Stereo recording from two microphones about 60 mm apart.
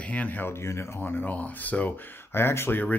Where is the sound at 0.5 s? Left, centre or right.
Left.